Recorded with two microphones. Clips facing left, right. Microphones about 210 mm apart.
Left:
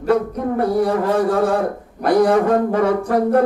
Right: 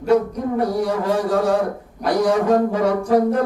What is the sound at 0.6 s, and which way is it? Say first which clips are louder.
Speech: left 4 dB; 55° left (ahead or behind).